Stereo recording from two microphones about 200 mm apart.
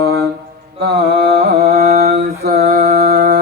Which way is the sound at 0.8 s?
55° right (ahead or behind).